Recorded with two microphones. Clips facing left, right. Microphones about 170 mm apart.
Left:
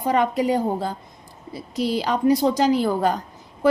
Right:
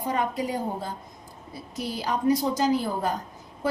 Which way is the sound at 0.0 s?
80° left.